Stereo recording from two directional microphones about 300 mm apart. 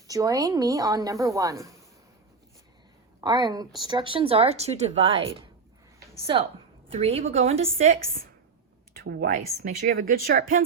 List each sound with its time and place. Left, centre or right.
0.1 s a woman's voice: centre
3.2 s a woman's voice: centre
6.3 s a woman's voice: centre
9.0 s speech: right